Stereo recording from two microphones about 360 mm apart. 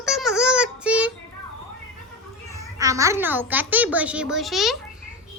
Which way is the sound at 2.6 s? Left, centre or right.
Centre.